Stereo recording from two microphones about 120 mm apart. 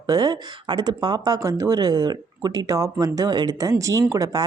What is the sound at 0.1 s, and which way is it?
Speech, 30° right (ahead or behind).